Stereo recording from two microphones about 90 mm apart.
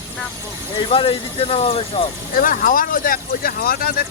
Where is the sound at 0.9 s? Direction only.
90° left.